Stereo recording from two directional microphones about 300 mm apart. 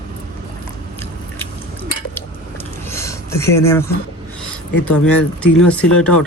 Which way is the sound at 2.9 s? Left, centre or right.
Centre.